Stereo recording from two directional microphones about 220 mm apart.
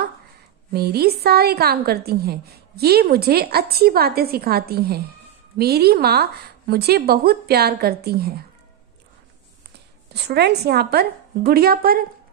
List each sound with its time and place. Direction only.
0.7 s a woman's voice: 45° right (ahead or behind)
10.1 s a woman's voice: 50° right (ahead or behind)